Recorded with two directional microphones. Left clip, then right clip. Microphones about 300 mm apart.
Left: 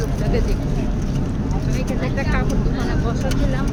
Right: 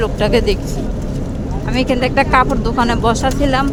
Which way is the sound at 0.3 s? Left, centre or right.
Right.